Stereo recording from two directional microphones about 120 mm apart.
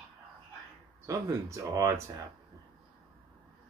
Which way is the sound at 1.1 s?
25° right (ahead or behind).